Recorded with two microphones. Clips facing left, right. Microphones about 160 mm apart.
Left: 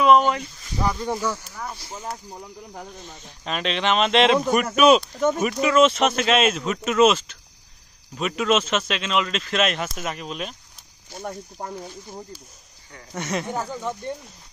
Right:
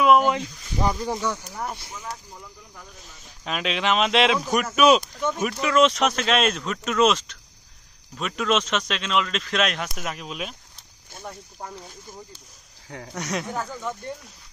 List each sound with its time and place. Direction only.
0.0 s a sound: 5° right (ahead or behind)
0.3 s speech: 20° right (ahead or behind)
1.0 s speech: centre (ahead or behind)
1.3 s speech: 20° right (ahead or behind)
1.9 s speech: 35° left (ahead or behind)
3.4 s speech: 5° right (ahead or behind)
13.1 s speech: centre (ahead or behind)
13.5 s speech: 15° left (ahead or behind)